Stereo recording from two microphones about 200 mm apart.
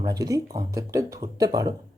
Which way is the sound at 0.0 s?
20° right (ahead or behind).